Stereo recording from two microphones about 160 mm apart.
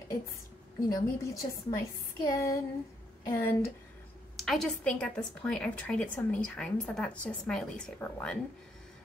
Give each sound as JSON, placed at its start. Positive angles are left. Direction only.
{"t": 0.8, "sound": "a woman's voice", "side_deg": 20}
{"t": 4.4, "sound": "a woman's voice", "side_deg": 0}